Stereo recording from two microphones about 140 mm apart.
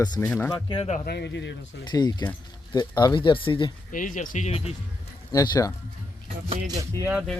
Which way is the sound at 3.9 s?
70° left (ahead or behind).